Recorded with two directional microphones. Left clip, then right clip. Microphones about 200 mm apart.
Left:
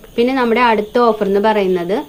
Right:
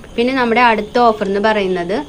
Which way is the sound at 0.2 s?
55° left (ahead or behind).